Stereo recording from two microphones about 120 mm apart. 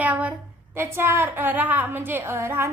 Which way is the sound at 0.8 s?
20° right (ahead or behind).